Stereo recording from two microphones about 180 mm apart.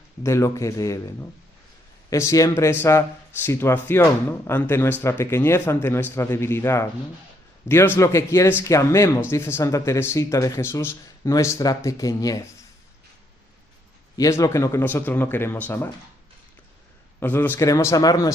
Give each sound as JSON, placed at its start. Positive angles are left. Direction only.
{"t": 0.2, "sound": "speech", "side_deg": 15}
{"t": 14.2, "sound": "speech", "side_deg": 15}
{"t": 17.2, "sound": "speech", "side_deg": 10}